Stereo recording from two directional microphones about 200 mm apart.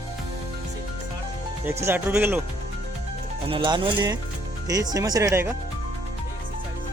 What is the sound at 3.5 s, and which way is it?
Speech, 25° right (ahead or behind).